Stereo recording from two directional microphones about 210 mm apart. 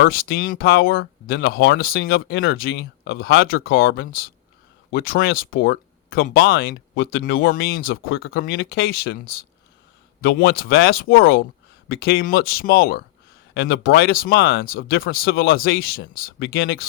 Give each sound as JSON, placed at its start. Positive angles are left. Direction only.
{"t": 0.0, "sound": "speech", "side_deg": 45}
{"t": 11.9, "sound": "speech", "side_deg": 45}